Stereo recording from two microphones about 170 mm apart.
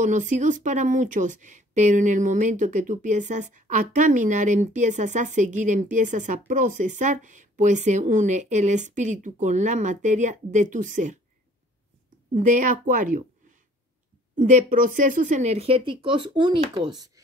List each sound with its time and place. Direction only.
0.0 s speech: 50° right (ahead or behind)
12.4 s speech: 50° right (ahead or behind)
14.3 s speech: 50° right (ahead or behind); by 17.1 s 25° right (ahead or behind)